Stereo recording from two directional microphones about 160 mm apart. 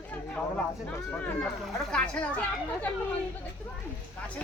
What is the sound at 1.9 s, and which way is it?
Speech, 5° left (ahead or behind).